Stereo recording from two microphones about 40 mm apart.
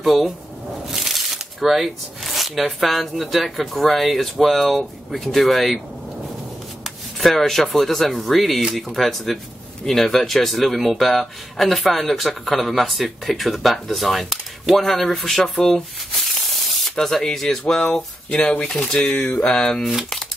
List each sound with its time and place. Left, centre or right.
0.0 s speech: centre
6.8 s speech: centre
19.0 s a sound: centre
19.8 s speech: centre